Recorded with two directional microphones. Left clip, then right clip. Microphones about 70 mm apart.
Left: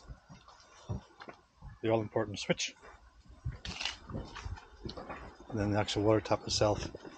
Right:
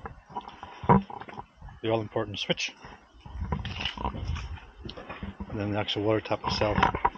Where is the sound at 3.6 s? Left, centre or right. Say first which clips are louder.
Right 3 dB; left.